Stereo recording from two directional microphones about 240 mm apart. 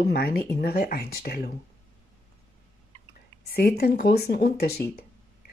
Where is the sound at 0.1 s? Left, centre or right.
Left.